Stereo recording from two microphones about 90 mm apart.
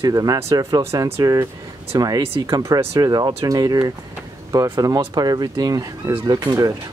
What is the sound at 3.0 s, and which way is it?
Speech, 45° right (ahead or behind).